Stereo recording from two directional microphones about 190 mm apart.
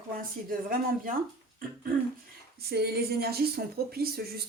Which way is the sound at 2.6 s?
55° right (ahead or behind).